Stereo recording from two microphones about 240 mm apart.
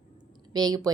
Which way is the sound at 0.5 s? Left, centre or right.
Centre.